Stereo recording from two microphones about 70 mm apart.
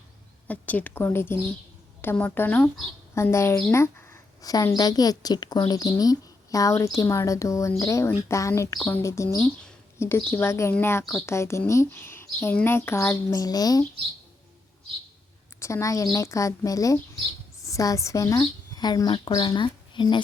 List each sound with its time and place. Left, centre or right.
0.4 s a woman's voice: left
4.4 s a woman's voice: left
10.0 s a woman's voice: left
13.3 s a woman's voice: left
15.6 s a woman's voice: left
19.0 s speech: left